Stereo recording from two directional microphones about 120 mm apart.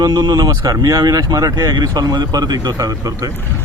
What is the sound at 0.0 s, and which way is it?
Speech, 35° right (ahead or behind).